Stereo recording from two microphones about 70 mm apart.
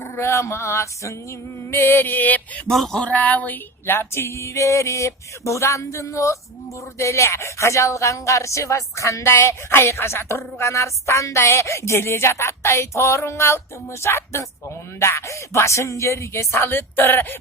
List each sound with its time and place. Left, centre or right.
0.2 s a woman's voice: left
1.7 s a sound: left
2.6 s speech: centre
3.1 s a woman's voice: left